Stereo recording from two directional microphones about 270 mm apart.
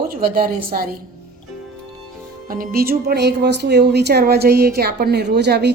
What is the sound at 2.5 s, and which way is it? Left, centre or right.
A woman's voice, right.